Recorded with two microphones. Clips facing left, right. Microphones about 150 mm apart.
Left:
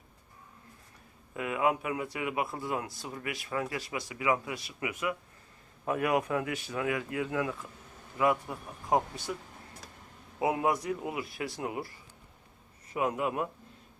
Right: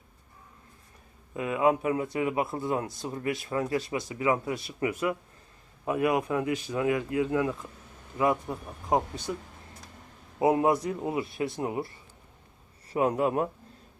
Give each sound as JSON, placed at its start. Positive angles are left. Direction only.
{"t": 1.3, "sound": "speech", "side_deg": -25}
{"t": 5.8, "sound": "speech", "side_deg": -20}
{"t": 10.4, "sound": "speech", "side_deg": -30}